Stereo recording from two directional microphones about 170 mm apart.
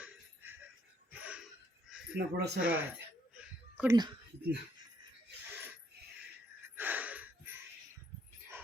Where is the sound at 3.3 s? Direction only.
5° right (ahead or behind).